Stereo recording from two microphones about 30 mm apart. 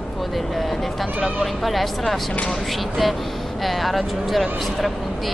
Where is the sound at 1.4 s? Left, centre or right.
Centre.